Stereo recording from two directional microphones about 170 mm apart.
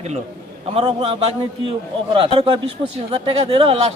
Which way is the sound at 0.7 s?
30° right (ahead or behind).